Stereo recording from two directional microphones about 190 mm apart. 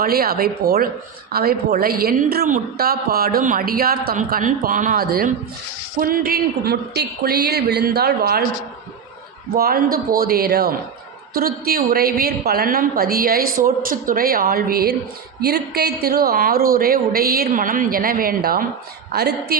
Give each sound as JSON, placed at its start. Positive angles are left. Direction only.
{"t": 0.0, "sound": "a woman's voice", "side_deg": -50}
{"t": 9.6, "sound": "a woman's voice", "side_deg": -50}